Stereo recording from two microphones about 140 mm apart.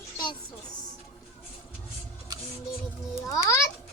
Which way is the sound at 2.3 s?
25° right (ahead or behind).